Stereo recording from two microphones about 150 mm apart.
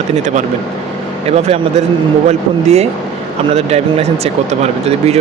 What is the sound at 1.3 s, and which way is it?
A man's voice, 45° right (ahead or behind).